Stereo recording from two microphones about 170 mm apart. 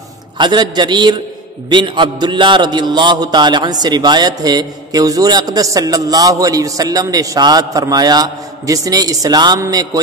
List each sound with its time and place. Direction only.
0.4 s a man's voice: 25° right (ahead or behind)